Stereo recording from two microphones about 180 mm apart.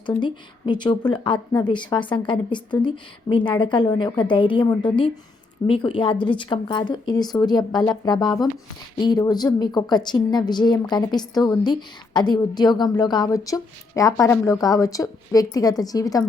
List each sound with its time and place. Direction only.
0.2 s a woman's voice: 25° left (ahead or behind)